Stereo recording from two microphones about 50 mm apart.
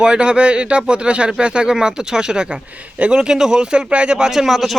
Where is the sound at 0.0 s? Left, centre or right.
Centre.